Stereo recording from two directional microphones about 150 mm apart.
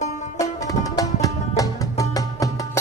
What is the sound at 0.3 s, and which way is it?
Music, 25° left (ahead or behind).